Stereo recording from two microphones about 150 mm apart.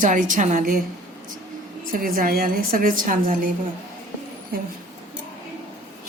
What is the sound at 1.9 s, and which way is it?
A woman's voice, 70° right (ahead or behind).